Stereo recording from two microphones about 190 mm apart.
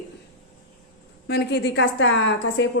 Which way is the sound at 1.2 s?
60° left (ahead or behind).